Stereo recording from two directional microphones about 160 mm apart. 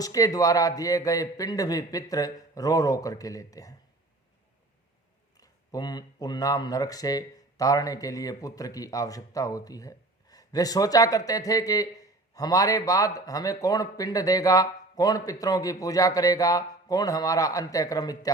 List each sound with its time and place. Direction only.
0.0 s speech: 20° left (ahead or behind)
5.4 s speech: 25° left (ahead or behind)